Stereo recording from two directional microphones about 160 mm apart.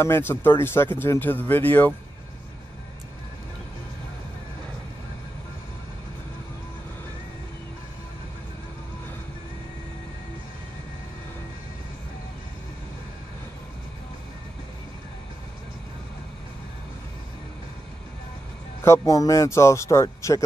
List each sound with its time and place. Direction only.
0.0 s speech: 15° left (ahead or behind)
18.9 s speech: 20° left (ahead or behind)